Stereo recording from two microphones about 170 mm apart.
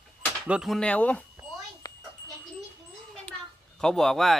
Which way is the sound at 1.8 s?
20° left (ahead or behind).